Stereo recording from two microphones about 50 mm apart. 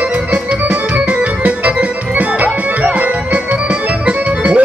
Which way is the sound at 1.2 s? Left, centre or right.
Right.